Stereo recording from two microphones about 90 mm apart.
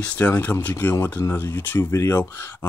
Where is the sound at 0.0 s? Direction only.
15° left (ahead or behind).